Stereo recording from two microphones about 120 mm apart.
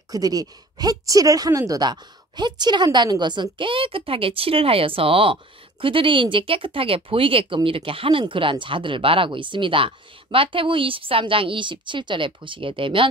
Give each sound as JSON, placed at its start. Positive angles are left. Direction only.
{"t": 0.1, "sound": "speech", "side_deg": -30}